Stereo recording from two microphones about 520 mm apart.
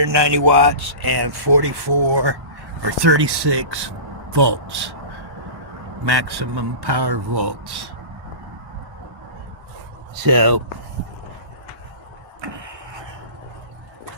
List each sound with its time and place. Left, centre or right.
0.0 s speech: right
6.1 s speech: right
10.2 s speech: right
12.4 s a sound: right